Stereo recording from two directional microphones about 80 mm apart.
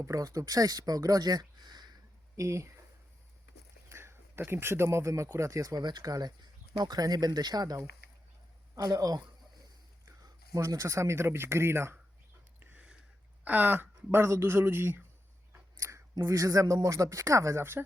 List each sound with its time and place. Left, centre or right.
0.0 s speech: right
2.3 s speech: right
3.8 s speech: right
5.8 s speech: right
10.2 s speech: right
12.5 s a sound: centre
13.4 s speech: right